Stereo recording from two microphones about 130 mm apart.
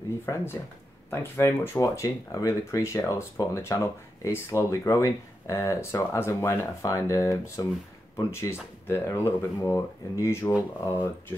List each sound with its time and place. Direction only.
0.2 s speech: 20° left (ahead or behind)